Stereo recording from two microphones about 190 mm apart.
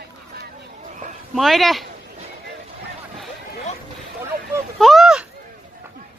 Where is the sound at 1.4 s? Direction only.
Centre (ahead or behind).